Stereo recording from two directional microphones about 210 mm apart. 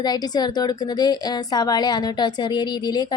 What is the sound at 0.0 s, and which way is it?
A woman's voice, 20° left (ahead or behind).